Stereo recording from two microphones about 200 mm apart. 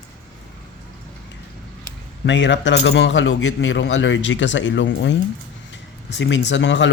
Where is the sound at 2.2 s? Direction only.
60° left (ahead or behind).